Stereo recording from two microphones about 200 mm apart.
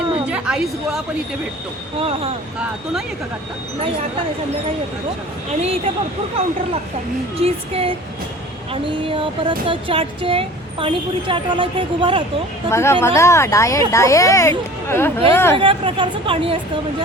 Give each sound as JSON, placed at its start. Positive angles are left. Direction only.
{"t": 0.3, "sound": "a woman's voice", "side_deg": -5}
{"t": 2.0, "sound": "speech", "side_deg": -30}
{"t": 5.5, "sound": "a woman's voice", "side_deg": -30}
{"t": 7.3, "sound": "speech", "side_deg": -30}
{"t": 12.7, "sound": "speech", "side_deg": 15}
{"t": 15.5, "sound": "speech", "side_deg": -25}